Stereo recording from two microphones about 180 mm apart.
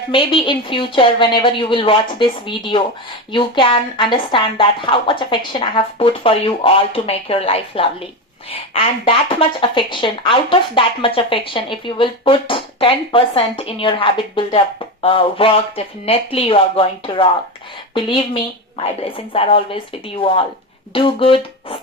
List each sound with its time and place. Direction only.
0.1 s speech: 30° left (ahead or behind)
18.8 s a woman's voice: 30° left (ahead or behind)